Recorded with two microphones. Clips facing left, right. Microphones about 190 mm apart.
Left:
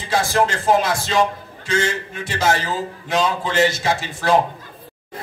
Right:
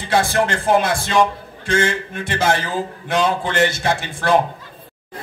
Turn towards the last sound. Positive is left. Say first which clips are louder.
# right 1 dB
turn(degrees=-55)  # may be behind; listen again after turning